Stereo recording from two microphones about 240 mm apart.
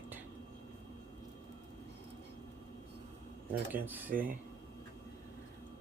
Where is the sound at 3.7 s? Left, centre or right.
Centre.